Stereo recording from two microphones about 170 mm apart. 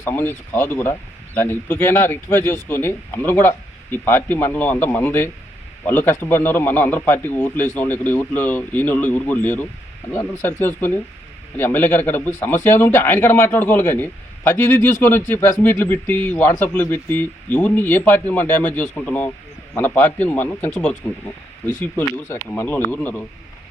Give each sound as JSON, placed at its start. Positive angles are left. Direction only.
{"t": 0.0, "sound": "speech", "side_deg": 15}